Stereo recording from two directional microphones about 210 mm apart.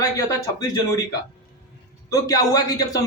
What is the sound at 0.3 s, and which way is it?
Speech, 15° left (ahead or behind).